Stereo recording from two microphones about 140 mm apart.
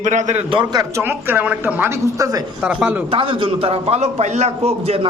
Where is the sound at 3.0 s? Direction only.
40° right (ahead or behind).